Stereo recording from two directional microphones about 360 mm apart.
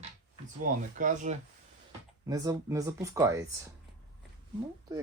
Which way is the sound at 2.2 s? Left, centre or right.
Centre.